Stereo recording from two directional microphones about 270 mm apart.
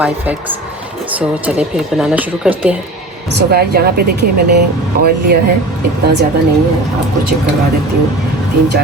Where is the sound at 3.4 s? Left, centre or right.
Right.